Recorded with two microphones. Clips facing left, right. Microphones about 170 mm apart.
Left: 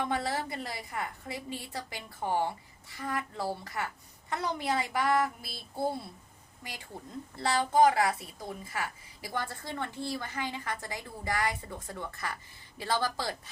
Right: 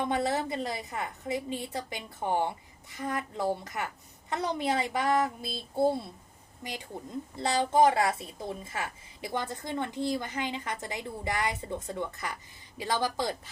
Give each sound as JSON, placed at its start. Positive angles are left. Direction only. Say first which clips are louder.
{"t": 0.0, "sound": "a woman's voice", "louder": "right 3 dB", "side_deg": -20}